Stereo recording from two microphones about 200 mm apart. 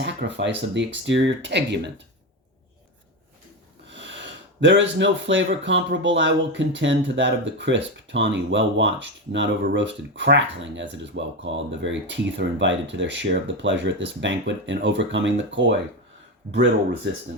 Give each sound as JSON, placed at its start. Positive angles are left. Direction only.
{"t": 0.0, "sound": "speech", "side_deg": -60}
{"t": 4.6, "sound": "speech", "side_deg": -65}
{"t": 17.1, "sound": "speech", "side_deg": -60}